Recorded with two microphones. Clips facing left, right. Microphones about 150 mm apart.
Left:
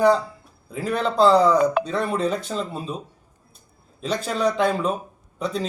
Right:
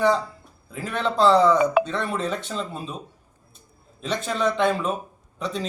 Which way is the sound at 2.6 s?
Centre (ahead or behind).